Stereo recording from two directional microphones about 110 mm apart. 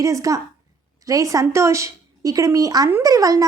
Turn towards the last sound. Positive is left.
turn(degrees=-30)  # may be behind; listen again after turning